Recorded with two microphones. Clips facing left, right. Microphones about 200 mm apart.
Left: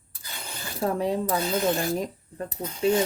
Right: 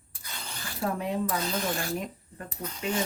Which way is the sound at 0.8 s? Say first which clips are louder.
Left 4 dB; 35° left (ahead or behind).